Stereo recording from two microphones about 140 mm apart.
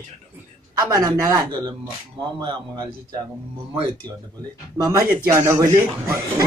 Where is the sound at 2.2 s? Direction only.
35° right (ahead or behind).